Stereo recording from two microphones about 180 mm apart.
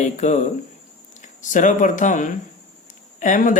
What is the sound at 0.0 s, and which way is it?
Speech, 40° left (ahead or behind).